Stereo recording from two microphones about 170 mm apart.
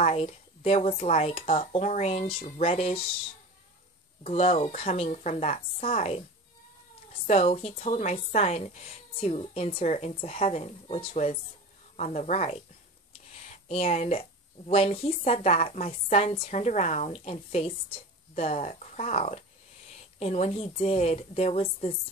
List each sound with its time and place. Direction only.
0.0 s a woman's voice: 40° left (ahead or behind)
4.2 s a woman's voice: 35° left (ahead or behind)
7.2 s a woman's voice: 40° left (ahead or behind)